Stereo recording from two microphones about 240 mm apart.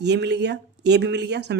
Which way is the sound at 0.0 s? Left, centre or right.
Right.